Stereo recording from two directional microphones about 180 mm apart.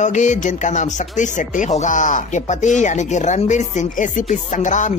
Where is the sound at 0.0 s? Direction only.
45° left (ahead or behind).